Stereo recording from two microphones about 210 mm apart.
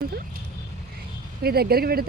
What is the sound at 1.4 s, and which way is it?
Speech, 50° right (ahead or behind).